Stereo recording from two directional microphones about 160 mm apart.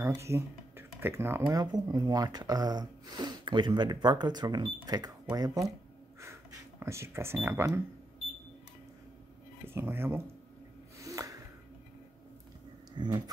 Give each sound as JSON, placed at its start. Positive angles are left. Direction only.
{"t": 0.0, "sound": "speech", "side_deg": -20}
{"t": 6.8, "sound": "speech", "side_deg": -15}
{"t": 9.7, "sound": "speech", "side_deg": -15}
{"t": 11.0, "sound": "a sound", "side_deg": -20}
{"t": 12.9, "sound": "vehicle", "side_deg": -25}